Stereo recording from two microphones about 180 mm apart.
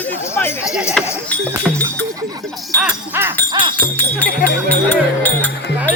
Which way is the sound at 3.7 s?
10° left (ahead or behind).